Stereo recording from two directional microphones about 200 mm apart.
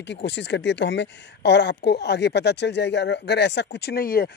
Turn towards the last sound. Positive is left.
turn(degrees=50)  # may be behind; listen again after turning